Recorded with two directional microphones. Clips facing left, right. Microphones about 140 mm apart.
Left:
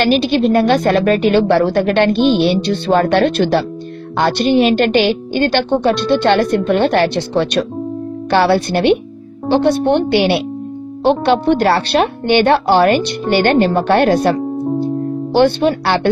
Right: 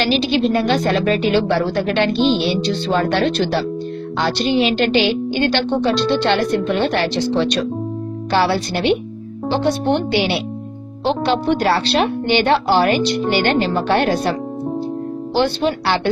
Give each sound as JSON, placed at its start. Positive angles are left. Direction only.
{"t": 0.0, "sound": "a woman's voice", "side_deg": 50}
{"t": 15.3, "sound": "speech", "side_deg": 55}